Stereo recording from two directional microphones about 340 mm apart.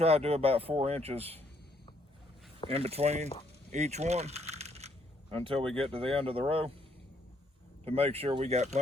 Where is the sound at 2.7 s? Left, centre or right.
Centre.